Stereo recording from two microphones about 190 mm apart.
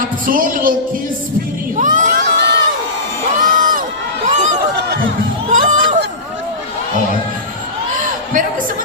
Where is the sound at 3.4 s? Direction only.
45° right (ahead or behind).